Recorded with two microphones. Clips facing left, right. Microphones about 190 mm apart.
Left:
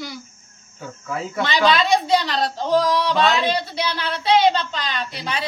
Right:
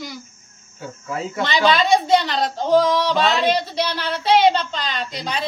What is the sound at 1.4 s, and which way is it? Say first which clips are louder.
A woman's voice: even; 10° right (ahead or behind).